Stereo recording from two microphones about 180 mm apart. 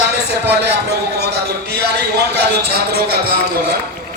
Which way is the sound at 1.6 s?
65° right (ahead or behind).